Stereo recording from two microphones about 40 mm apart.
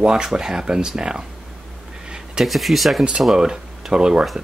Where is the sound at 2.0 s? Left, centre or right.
Right.